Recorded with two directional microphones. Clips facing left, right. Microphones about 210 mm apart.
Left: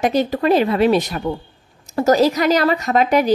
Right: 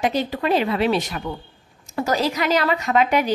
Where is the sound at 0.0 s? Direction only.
45° left (ahead or behind).